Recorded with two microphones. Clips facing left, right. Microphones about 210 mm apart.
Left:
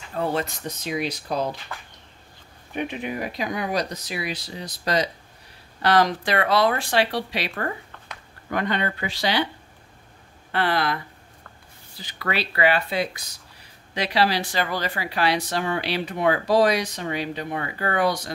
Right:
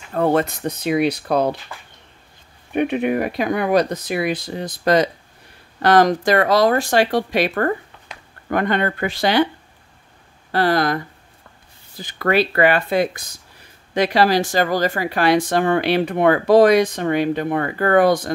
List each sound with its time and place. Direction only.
0.1 s speech: 55° right (ahead or behind)
2.7 s speech: 60° right (ahead or behind)
10.5 s speech: 40° right (ahead or behind)
12.0 s speech: 50° right (ahead or behind)